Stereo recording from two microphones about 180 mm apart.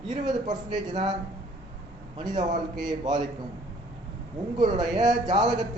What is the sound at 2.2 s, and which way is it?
Speech, 25° right (ahead or behind).